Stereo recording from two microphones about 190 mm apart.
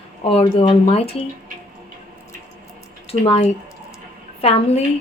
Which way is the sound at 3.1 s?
30° left (ahead or behind).